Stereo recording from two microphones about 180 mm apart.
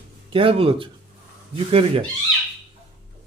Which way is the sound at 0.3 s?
30° right (ahead or behind).